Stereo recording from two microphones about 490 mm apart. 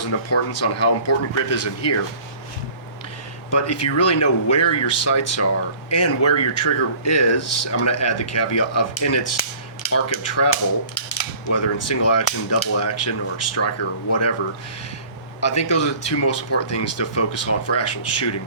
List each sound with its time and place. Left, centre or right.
0.0 s cap gun: left
3.5 s cap gun: left
15.4 s cap gun: left